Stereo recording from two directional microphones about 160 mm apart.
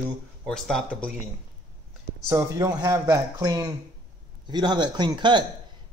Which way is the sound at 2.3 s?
20° right (ahead or behind).